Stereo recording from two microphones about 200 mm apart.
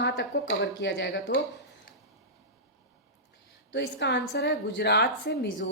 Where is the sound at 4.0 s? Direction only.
60° left (ahead or behind).